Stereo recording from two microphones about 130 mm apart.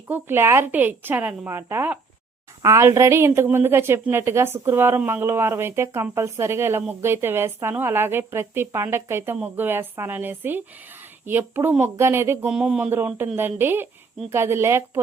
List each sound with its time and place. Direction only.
0.1 s a woman's voice: 15° right (ahead or behind)
12.5 s a woman's voice: 5° right (ahead or behind)